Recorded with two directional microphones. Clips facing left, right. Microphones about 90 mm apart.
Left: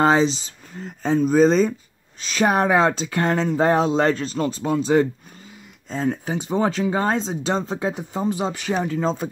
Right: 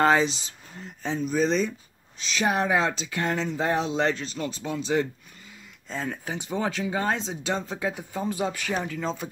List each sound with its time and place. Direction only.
0.0 s speech: 25° left (ahead or behind)
0.8 s speech: 45° left (ahead or behind)